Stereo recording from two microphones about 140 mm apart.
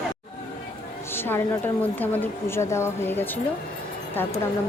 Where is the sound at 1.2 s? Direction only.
15° left (ahead or behind).